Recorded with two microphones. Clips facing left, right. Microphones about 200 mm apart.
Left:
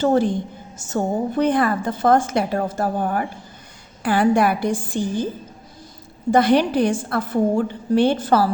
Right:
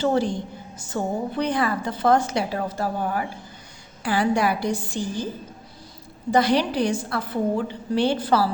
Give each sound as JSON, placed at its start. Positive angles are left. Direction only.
{"t": 0.0, "sound": "a woman's voice", "side_deg": 50}
{"t": 6.3, "sound": "a woman's voice", "side_deg": 55}